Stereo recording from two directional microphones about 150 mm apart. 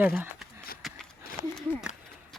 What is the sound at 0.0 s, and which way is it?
Speech, 10° right (ahead or behind).